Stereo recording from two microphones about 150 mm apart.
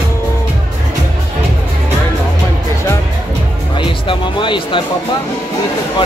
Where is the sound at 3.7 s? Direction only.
35° left (ahead or behind).